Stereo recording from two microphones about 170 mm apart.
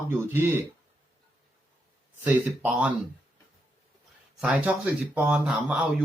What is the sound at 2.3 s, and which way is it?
Speech, 10° right (ahead or behind).